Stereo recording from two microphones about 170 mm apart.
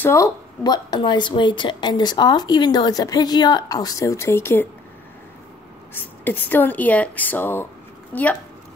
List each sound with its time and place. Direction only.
0.0 s speech: 15° left (ahead or behind)
5.9 s speech: 10° left (ahead or behind)